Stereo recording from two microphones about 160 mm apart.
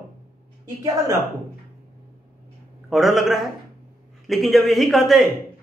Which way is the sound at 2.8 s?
Centre (ahead or behind).